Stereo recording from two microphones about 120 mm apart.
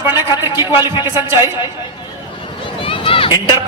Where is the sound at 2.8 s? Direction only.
50° left (ahead or behind).